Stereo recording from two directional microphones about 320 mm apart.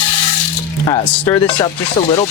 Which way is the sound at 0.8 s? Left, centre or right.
Centre.